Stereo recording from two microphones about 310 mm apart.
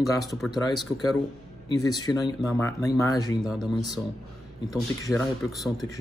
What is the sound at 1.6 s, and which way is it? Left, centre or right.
Speech, centre.